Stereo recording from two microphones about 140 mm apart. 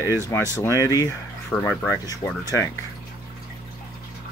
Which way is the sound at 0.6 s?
20° left (ahead or behind).